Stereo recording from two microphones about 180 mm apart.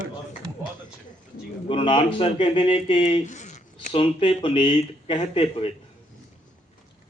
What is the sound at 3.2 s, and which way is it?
Speech, 40° left (ahead or behind).